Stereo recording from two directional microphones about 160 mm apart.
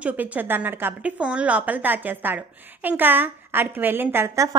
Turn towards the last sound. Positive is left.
turn(degrees=-15)  # may be behind; listen again after turning